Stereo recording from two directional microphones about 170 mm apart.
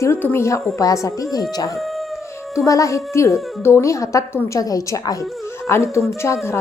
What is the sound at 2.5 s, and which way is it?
Speech, 20° left (ahead or behind).